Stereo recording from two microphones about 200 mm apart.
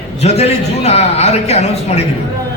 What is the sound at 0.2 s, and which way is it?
A man's voice, 30° left (ahead or behind).